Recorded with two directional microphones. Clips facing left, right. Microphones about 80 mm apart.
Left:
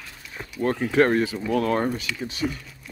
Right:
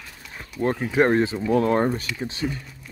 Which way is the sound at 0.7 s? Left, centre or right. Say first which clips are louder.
Left 2 dB; centre.